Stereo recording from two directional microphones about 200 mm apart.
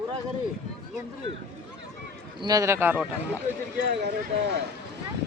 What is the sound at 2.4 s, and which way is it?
Speech, 20° right (ahead or behind).